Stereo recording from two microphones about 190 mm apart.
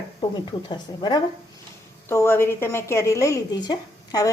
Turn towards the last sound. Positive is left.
turn(degrees=20)  # may be behind; listen again after turning